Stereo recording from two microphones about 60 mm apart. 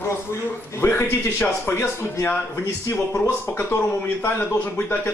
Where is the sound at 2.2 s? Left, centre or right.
Left.